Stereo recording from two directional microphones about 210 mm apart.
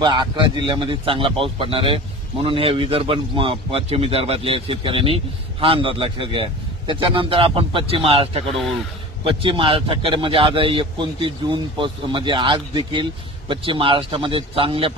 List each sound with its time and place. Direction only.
0.0 s a man's voice: 20° right (ahead or behind)